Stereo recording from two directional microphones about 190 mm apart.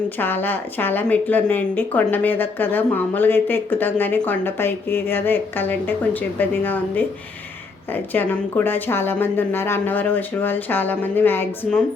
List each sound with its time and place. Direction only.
0.2 s a woman's voice: 10° left (ahead or behind)